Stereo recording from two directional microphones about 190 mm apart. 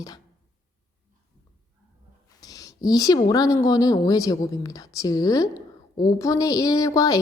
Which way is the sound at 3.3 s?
20° left (ahead or behind).